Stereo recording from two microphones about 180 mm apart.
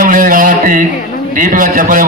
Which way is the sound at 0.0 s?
50° right (ahead or behind).